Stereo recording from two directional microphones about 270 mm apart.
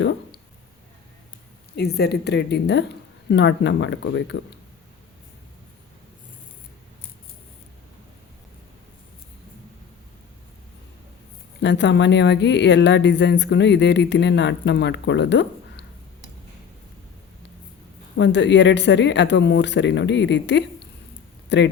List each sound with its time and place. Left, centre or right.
0.0 s speech: left
1.7 s speech: left
11.6 s speech: left
18.2 s speech: left